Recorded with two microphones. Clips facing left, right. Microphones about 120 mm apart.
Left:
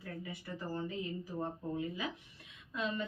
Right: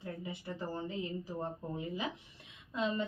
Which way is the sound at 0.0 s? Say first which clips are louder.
Right 2 dB; 20° right (ahead or behind).